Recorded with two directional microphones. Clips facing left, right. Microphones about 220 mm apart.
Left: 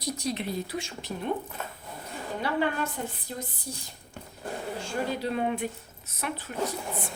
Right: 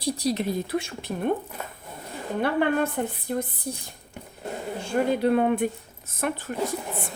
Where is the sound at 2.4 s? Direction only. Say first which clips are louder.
Right 5 dB; 55° right (ahead or behind).